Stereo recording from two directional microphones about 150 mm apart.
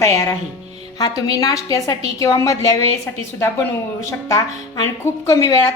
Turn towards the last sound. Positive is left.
turn(degrees=25)  # may be behind; listen again after turning